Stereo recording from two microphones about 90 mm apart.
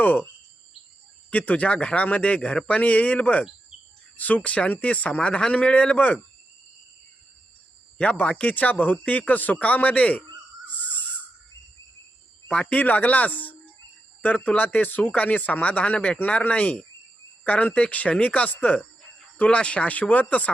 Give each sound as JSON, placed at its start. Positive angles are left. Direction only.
{"t": 0.0, "sound": "speech", "side_deg": 20}
{"t": 1.3, "sound": "speech", "side_deg": 15}
{"t": 7.9, "sound": "speech", "side_deg": 15}
{"t": 12.5, "sound": "speech", "side_deg": 10}